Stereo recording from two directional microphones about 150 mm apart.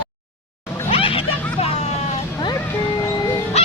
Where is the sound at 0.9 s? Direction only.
40° left (ahead or behind).